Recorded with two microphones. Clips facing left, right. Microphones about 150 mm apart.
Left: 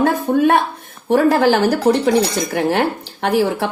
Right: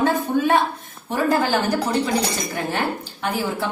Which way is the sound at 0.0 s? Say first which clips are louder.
Left 5 dB; 60° left (ahead or behind).